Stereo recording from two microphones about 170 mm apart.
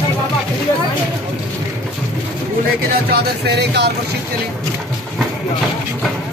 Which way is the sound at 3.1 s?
80° right.